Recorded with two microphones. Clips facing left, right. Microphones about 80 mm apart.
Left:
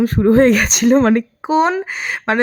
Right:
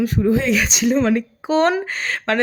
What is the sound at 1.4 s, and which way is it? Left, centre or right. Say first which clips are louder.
Speech: left 1 dB; centre.